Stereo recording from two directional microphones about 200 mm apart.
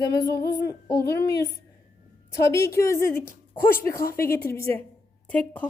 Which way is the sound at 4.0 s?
50° left (ahead or behind).